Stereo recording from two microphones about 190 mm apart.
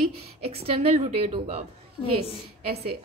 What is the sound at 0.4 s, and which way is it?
A woman's voice, 30° right (ahead or behind).